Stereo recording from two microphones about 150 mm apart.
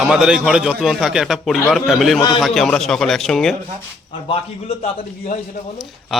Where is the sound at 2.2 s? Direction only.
30° left (ahead or behind).